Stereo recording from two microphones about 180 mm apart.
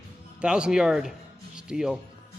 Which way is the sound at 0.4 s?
5° right (ahead or behind).